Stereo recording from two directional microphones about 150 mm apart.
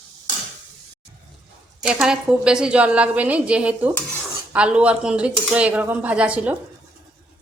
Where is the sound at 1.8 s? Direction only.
5° right (ahead or behind).